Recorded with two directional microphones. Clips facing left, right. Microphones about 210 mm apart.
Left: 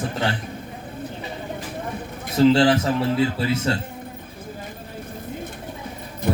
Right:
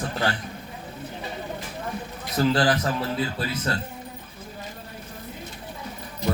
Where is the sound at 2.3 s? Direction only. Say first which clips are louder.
Left 6 dB; 25° left (ahead or behind).